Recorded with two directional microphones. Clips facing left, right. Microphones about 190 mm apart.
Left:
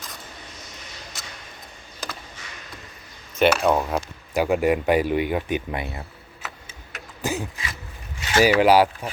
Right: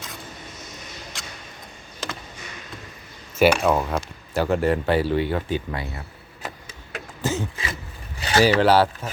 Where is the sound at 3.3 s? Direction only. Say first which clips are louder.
Right 1 dB; 5° right (ahead or behind); by 6.0 s 20° left (ahead or behind).